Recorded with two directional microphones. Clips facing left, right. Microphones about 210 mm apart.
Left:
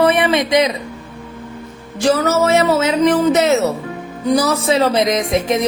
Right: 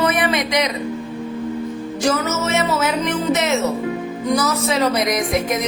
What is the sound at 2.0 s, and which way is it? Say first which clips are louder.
Music: left 6 dB; 35° left (ahead or behind).